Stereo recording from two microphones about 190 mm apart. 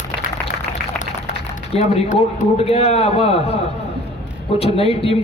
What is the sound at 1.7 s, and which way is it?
A man's voice, 35° left (ahead or behind).